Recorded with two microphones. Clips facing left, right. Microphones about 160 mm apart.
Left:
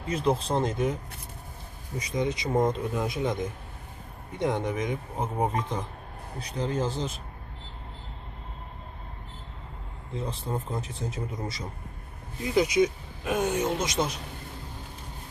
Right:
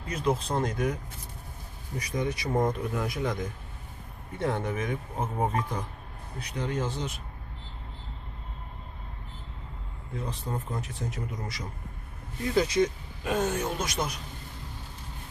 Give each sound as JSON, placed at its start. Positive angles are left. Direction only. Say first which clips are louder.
{"t": 0.1, "sound": "speech", "louder": "left 2 dB", "side_deg": 30}
{"t": 2.0, "sound": "speech", "louder": "left 2 dB", "side_deg": 20}
{"t": 4.4, "sound": "speech", "louder": "left 2 dB", "side_deg": 15}
{"t": 6.6, "sound": "speech", "louder": "left 2 dB", "side_deg": 30}
{"t": 10.2, "sound": "speech", "louder": "left 2 dB", "side_deg": 30}
{"t": 12.5, "sound": "speech", "louder": "left 2 dB", "side_deg": 15}